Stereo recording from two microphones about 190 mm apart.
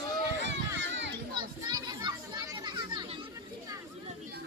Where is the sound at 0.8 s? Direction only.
70° right (ahead or behind).